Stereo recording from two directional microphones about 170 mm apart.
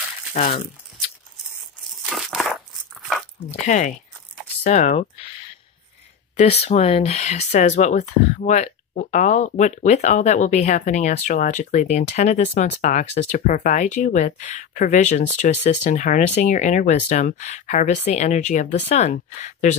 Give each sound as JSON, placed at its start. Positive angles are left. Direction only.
{"t": 0.3, "sound": "speech", "side_deg": 50}
{"t": 2.0, "sound": "crumpling", "side_deg": 0}
{"t": 3.6, "sound": "speech", "side_deg": 45}
{"t": 6.3, "sound": "speech", "side_deg": 40}